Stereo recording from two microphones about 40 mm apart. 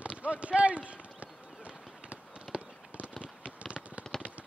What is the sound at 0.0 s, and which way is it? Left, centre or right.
Run, right.